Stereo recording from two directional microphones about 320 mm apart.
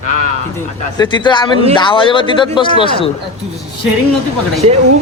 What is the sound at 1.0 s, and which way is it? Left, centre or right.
Speech, centre.